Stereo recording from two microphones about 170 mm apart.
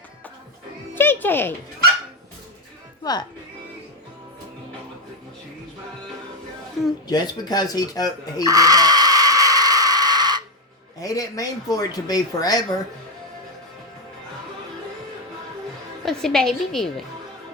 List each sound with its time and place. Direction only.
0.9 s music: 15° left (ahead or behind)
3.0 s speech: 25° left (ahead or behind)
7.1 s speech: 25° left (ahead or behind)
8.4 s a sound: 20° right (ahead or behind)
11.0 s speech: 20° left (ahead or behind)
16.0 s a woman's voice: 5° left (ahead or behind)